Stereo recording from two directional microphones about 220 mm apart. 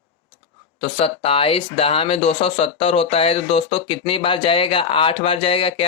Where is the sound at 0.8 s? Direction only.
25° left (ahead or behind).